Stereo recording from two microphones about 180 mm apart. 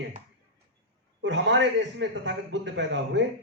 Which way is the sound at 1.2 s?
85° right.